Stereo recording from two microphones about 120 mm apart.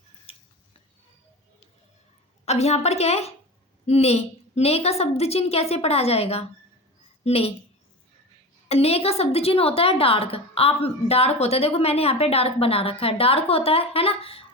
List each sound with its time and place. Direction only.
0.3 s a sound: 50° left (ahead or behind)
2.4 s a woman's voice: 65° left (ahead or behind)
8.7 s a woman's voice: 55° left (ahead or behind)